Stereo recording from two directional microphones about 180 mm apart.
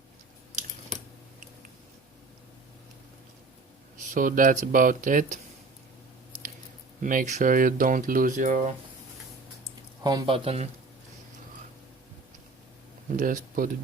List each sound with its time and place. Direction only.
4.1 s speech: 50° right (ahead or behind)
7.0 s speech: 45° right (ahead or behind)
10.0 s speech: 20° right (ahead or behind)
13.1 s speech: 50° right (ahead or behind)